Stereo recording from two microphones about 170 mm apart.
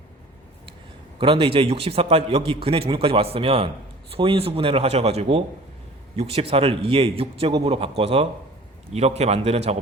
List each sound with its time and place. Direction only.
1.2 s a man's voice: 30° right (ahead or behind)